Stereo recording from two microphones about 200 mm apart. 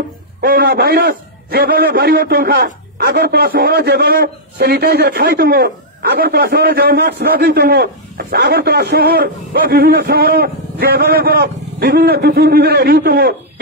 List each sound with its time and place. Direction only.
0.4 s a man's voice: 50° right (ahead or behind)